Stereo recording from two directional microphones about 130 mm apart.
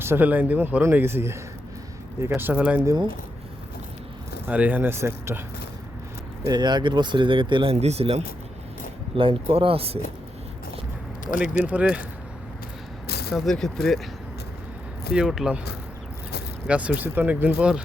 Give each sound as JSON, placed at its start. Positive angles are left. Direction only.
{"t": 0.0, "sound": "speech", "side_deg": -15}
{"t": 2.8, "sound": "speech", "side_deg": -30}
{"t": 4.4, "sound": "speech", "side_deg": -15}
{"t": 6.5, "sound": "speech", "side_deg": -35}
{"t": 11.6, "sound": "speech", "side_deg": -10}
{"t": 13.3, "sound": "speech", "side_deg": 0}
{"t": 15.1, "sound": "speech", "side_deg": -5}
{"t": 16.6, "sound": "speech", "side_deg": -10}